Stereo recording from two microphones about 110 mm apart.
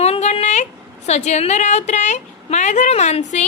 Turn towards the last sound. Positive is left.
turn(degrees=90)